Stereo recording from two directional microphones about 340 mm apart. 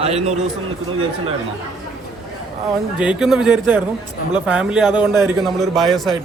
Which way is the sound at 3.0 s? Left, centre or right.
Centre.